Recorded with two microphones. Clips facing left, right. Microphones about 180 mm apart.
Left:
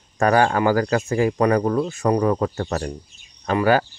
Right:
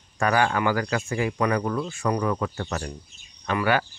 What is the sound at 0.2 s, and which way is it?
Speech, 40° left (ahead or behind).